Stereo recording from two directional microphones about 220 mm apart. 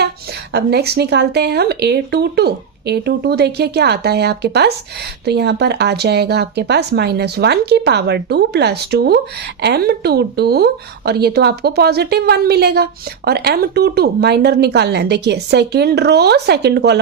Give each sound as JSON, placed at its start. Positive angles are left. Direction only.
{"t": 0.5, "sound": "speech", "side_deg": -50}